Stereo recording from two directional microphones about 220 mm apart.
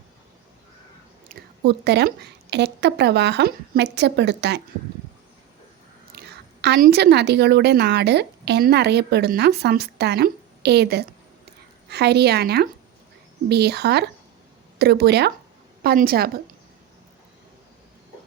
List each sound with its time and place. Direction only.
1.3 s a woman's voice: 50° right (ahead or behind)
6.1 s a woman's voice: 50° right (ahead or behind)